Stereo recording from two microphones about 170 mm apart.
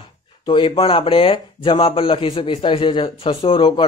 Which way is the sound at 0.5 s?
30° left (ahead or behind).